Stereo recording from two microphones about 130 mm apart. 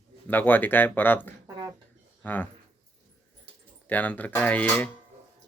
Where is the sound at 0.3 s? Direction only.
15° left (ahead or behind).